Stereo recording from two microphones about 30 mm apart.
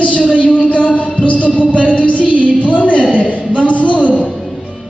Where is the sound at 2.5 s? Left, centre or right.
Left.